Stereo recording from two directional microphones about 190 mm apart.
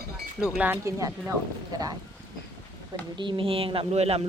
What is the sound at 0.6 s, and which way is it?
Speech, 15° right (ahead or behind).